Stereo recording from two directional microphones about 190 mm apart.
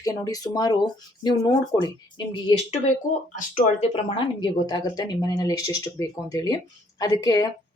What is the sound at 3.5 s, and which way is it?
Speech, 40° left (ahead or behind).